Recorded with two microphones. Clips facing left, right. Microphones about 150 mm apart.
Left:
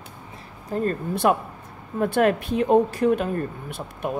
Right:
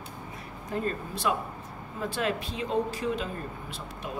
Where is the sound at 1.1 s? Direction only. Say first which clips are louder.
Left 8 dB; 60° left (ahead or behind).